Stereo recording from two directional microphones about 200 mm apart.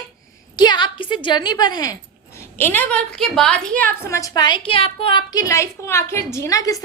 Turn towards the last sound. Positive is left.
turn(degrees=15)  # may be behind; listen again after turning